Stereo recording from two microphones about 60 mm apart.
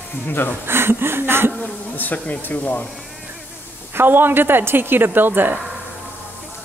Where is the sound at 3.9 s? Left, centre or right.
Right.